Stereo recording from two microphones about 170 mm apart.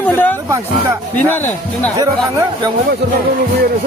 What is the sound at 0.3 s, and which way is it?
Speech, 20° right (ahead or behind).